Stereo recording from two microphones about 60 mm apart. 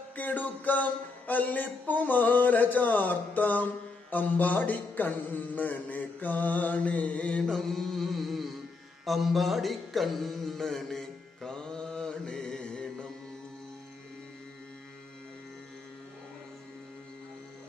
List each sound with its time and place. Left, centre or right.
0.1 s a sound: left
7.4 s carnatic music: centre
9.0 s music: centre